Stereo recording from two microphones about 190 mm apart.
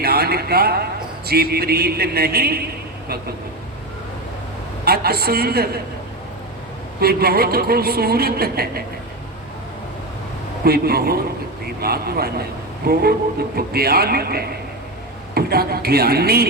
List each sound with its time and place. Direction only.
0.0 s a sound: 55° right (ahead or behind)
1.3 s speech: 55° right (ahead or behind)
4.9 s a man's voice: 55° right (ahead or behind)
7.0 s a man's voice: 55° right (ahead or behind)
10.6 s a man's voice: 55° right (ahead or behind)